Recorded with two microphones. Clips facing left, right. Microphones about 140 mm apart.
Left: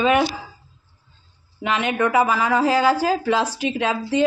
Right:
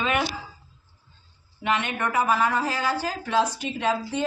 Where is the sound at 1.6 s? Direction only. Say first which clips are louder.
Left 5 dB; 90° left.